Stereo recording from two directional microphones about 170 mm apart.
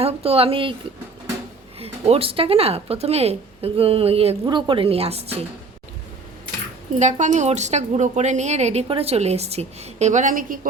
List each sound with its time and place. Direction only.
0.0 s speech: 35° right (ahead or behind)
1.8 s speech: 35° right (ahead or behind)
7.0 s a woman's voice: 45° right (ahead or behind)